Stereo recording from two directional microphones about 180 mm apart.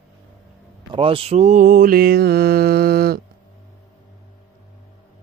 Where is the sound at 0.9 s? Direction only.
30° right (ahead or behind); by 3.2 s 60° right (ahead or behind).